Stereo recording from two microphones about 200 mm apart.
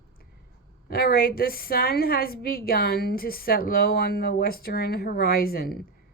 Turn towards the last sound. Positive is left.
turn(degrees=50)  # may be behind; listen again after turning